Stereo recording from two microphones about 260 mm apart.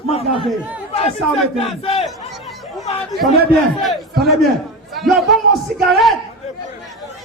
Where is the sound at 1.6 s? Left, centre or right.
Left.